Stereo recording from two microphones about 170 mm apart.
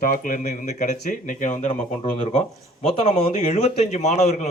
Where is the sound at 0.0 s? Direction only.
55° left (ahead or behind).